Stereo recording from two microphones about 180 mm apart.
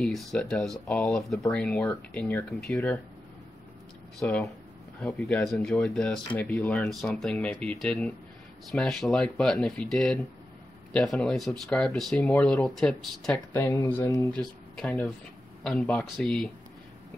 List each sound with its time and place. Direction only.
0.0 s speech: 5° left (ahead or behind)
4.2 s speech: centre (ahead or behind)
13.5 s speech: 15° left (ahead or behind)
14.3 s speech: 5° left (ahead or behind)